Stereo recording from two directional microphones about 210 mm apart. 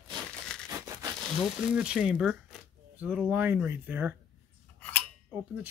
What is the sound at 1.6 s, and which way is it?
Speech, 5° right (ahead or behind).